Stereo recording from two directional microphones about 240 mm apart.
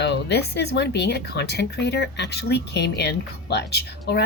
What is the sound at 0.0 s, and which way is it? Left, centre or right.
Speech, left.